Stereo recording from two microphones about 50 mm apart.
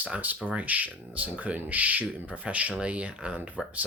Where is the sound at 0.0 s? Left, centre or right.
Right.